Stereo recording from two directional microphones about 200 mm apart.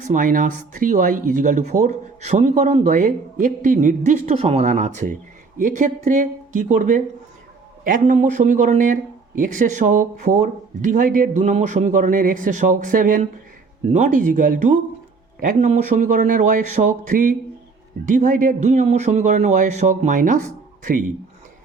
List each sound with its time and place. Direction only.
0.1 s speech: 40° right (ahead or behind)